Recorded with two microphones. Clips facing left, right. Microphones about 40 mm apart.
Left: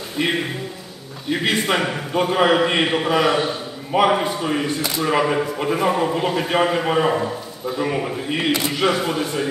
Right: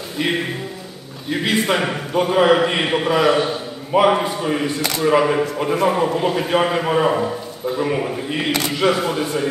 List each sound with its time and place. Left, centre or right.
0.2 s a man's voice: centre
8.5 s speech: right
8.7 s a man's voice: centre